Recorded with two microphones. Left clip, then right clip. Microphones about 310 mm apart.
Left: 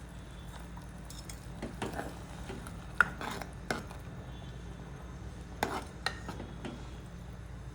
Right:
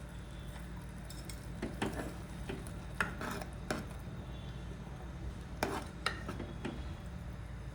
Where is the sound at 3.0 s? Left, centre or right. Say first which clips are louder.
Left 8 dB; centre.